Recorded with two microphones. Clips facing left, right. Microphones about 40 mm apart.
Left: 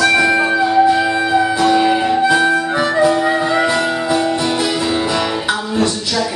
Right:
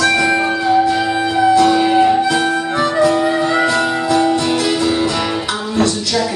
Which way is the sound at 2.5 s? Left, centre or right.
Centre.